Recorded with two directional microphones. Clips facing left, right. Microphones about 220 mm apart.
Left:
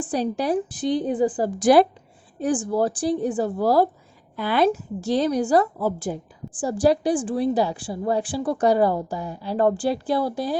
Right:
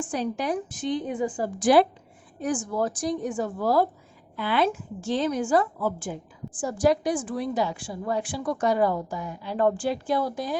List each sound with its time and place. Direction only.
0.0 s a woman's voice: 35° left (ahead or behind)